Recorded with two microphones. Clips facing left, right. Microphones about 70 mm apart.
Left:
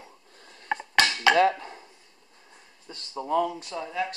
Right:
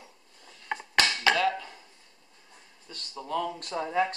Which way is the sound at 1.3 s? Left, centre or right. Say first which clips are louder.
Left 5 dB; left.